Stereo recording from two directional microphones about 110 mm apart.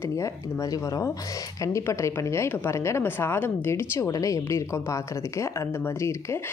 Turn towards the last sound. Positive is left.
turn(degrees=25)  # may be behind; listen again after turning